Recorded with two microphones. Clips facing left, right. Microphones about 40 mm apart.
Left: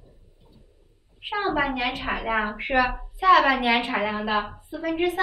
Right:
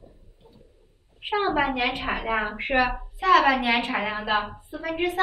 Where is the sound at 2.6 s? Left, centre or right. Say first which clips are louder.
Even; centre.